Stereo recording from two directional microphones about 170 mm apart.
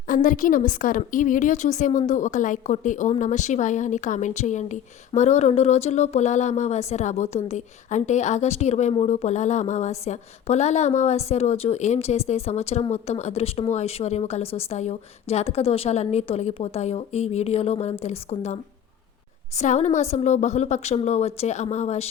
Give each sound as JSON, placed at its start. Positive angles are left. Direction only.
{"t": 0.1, "sound": "a woman's voice", "side_deg": 50}
{"t": 19.5, "sound": "a woman's voice", "side_deg": 45}